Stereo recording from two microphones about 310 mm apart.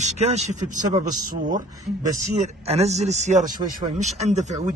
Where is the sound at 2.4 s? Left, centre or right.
Right.